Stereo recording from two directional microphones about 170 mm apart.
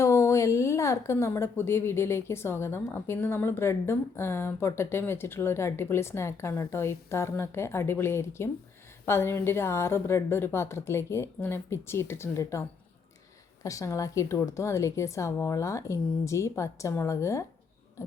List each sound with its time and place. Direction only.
0.0 s speech: 15° left (ahead or behind)